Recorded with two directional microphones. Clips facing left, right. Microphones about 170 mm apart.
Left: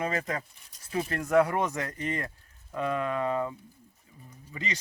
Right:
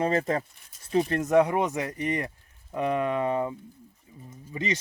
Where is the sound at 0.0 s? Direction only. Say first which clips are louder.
Right 6 dB; 30° right (ahead or behind).